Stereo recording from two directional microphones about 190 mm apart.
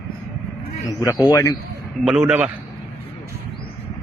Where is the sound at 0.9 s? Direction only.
20° left (ahead or behind).